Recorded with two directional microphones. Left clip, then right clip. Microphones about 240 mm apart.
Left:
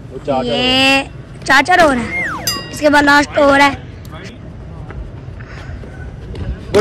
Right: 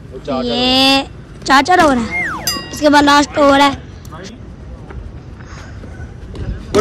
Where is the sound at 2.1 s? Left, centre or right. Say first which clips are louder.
Even; centre.